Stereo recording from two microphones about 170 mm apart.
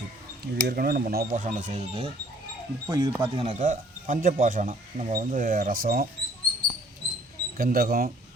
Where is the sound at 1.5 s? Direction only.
45° right (ahead or behind).